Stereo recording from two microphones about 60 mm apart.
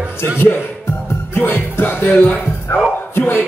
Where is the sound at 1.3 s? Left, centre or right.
Left.